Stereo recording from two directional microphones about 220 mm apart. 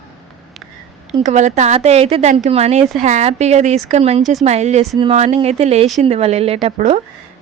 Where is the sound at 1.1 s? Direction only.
35° right (ahead or behind).